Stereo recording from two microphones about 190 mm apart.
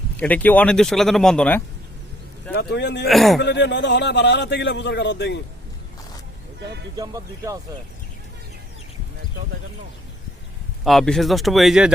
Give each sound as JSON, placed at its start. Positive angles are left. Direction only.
{"t": 0.2, "sound": "speech", "side_deg": 10}
{"t": 2.5, "sound": "a man's voice", "side_deg": 60}
{"t": 3.1, "sound": "speech", "side_deg": 0}
{"t": 3.4, "sound": "a man's voice", "side_deg": 65}
{"t": 6.9, "sound": "speech", "side_deg": -20}
{"t": 10.8, "sound": "speech", "side_deg": 0}